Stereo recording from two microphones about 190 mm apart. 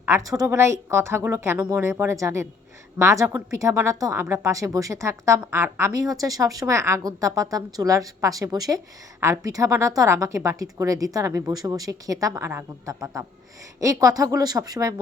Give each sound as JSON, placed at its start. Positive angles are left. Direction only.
{"t": 0.0, "sound": "speech", "side_deg": -15}